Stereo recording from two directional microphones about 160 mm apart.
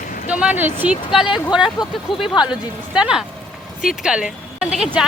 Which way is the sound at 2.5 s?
5° right (ahead or behind).